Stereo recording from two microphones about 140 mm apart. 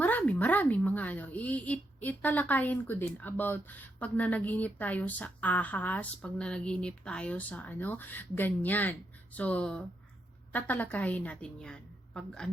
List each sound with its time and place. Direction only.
0.0 s a woman's voice: 10° left (ahead or behind)